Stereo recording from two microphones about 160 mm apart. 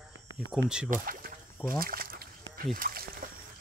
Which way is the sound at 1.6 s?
65° right (ahead or behind).